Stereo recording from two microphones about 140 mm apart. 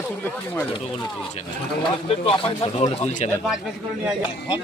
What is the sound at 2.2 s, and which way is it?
A man's voice, 40° left (ahead or behind).